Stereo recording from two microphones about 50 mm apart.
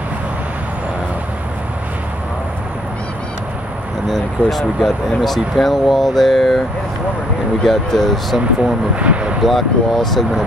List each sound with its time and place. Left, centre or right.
4.1 s speech: centre
7.6 s speech: centre
8.9 s speech: right
9.4 s speech: centre